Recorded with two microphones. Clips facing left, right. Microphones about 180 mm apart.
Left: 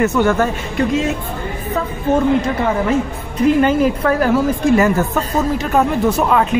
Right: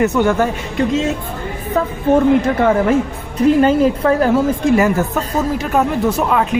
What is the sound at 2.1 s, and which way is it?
Speech, 55° right (ahead or behind).